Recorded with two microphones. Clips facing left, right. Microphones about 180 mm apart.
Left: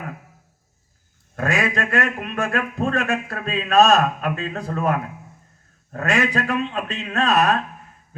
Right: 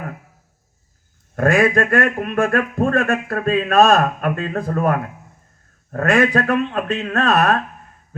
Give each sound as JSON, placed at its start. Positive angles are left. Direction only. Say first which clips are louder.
{"t": 1.4, "sound": "a man's voice", "louder": "right 7 dB", "side_deg": -50}